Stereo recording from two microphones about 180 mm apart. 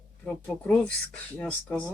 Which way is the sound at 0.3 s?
5° left (ahead or behind).